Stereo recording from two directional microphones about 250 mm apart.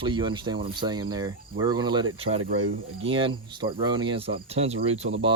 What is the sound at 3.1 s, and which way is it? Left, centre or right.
Cricket, right.